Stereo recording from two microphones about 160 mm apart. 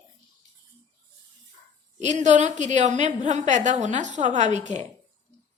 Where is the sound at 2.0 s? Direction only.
45° right (ahead or behind).